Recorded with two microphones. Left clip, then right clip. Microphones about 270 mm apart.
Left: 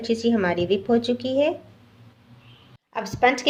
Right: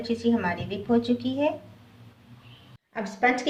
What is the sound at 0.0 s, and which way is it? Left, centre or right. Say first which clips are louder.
A woman's voice: left 4 dB; left.